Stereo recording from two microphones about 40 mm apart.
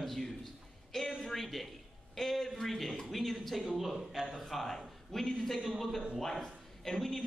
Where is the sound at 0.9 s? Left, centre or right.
Centre.